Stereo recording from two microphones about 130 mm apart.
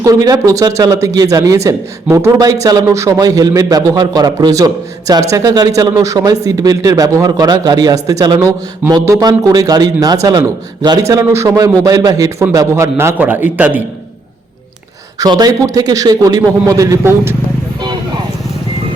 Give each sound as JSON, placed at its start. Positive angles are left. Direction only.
{"t": 0.0, "sound": "speech", "side_deg": -30}
{"t": 15.2, "sound": "speech", "side_deg": -30}